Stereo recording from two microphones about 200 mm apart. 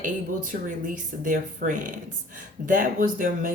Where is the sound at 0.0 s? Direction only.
40° right (ahead or behind).